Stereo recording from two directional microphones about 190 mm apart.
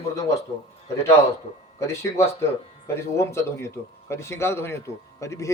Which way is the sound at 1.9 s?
15° left (ahead or behind).